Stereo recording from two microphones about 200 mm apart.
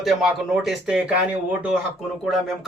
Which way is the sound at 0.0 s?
Centre (ahead or behind).